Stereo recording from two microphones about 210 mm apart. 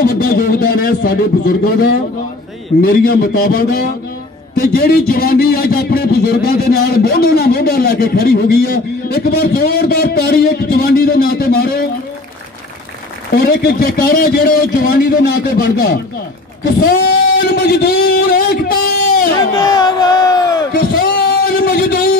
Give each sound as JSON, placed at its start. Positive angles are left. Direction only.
{"t": 0.0, "sound": "a man's voice", "side_deg": 45}
{"t": 13.3, "sound": "a man's voice", "side_deg": 45}
{"t": 19.5, "sound": "speech", "side_deg": 20}
{"t": 20.7, "sound": "a sound", "side_deg": 45}